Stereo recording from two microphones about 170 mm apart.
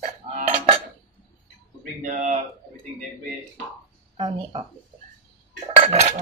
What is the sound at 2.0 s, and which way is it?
Speech, 45° right (ahead or behind).